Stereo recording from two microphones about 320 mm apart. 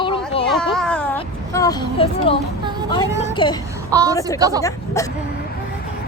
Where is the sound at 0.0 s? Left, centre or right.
Centre.